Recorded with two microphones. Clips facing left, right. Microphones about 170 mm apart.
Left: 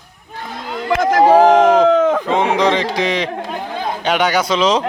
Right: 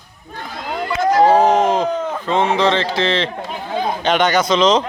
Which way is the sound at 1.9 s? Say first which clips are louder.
Left 9 dB; 90° left.